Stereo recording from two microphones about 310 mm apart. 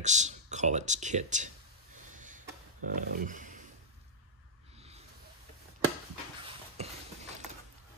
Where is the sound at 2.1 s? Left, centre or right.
Right.